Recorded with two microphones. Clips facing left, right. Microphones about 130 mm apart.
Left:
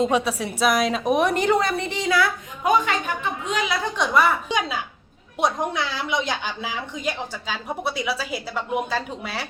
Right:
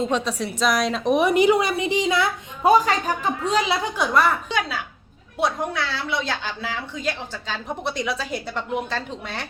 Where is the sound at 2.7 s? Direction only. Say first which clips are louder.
Right 3 dB; 35° right (ahead or behind).